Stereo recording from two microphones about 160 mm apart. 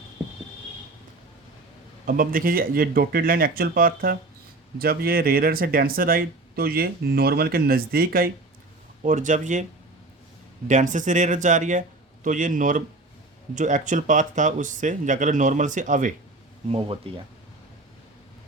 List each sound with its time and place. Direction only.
2.0 s speech: 60° right (ahead or behind)
9.0 s speech: 50° right (ahead or behind)
10.7 s speech: 50° right (ahead or behind)
16.6 s speech: 40° right (ahead or behind)